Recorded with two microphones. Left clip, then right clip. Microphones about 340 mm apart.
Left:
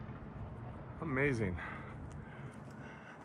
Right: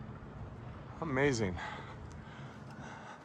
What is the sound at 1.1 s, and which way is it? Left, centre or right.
Speech, centre.